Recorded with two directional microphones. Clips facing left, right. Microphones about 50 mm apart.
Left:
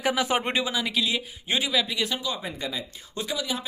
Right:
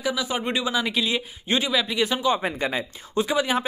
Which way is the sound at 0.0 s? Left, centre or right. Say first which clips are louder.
Left 2 dB; left.